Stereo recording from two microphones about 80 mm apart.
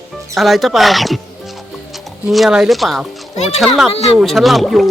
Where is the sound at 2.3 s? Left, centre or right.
Centre.